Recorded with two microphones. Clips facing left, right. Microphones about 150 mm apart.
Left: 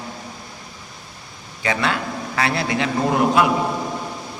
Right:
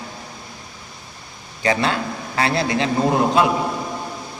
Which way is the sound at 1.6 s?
35° right (ahead or behind).